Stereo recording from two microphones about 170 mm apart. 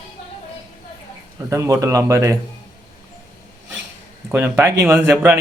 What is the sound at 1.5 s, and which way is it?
Speech, 20° right (ahead or behind).